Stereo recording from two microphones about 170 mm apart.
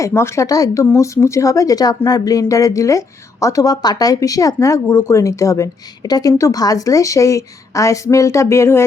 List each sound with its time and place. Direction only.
0.0 s speech: 15° left (ahead or behind)